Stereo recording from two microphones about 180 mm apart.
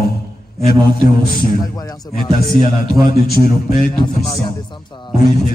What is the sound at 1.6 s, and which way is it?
Speech, 20° left (ahead or behind).